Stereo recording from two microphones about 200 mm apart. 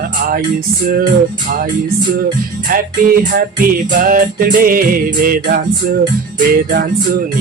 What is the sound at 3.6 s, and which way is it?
Music, 45° right (ahead or behind).